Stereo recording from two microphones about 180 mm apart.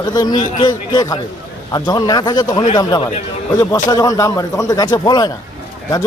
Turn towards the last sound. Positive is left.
turn(degrees=20)  # may be behind; listen again after turning